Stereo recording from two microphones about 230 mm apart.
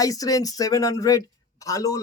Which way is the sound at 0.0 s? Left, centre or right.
Centre.